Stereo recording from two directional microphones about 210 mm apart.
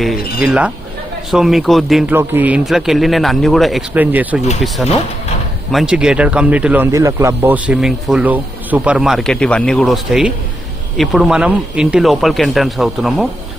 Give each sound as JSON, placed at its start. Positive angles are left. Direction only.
{"t": 0.0, "sound": "speech", "side_deg": 0}